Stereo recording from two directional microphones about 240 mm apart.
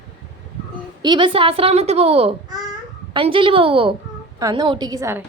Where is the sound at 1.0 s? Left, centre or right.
Centre.